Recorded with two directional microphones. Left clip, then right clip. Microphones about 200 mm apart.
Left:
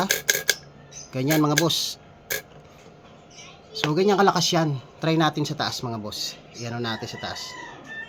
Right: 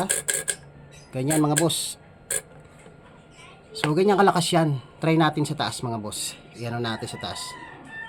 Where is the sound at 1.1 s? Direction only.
10° left (ahead or behind).